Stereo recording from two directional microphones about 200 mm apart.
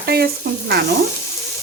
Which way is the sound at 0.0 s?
50° right (ahead or behind).